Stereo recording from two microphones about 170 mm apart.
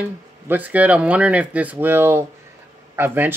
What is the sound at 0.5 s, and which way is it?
Speech, 10° right (ahead or behind).